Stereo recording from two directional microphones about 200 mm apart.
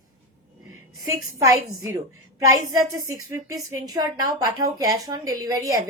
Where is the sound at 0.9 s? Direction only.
15° right (ahead or behind).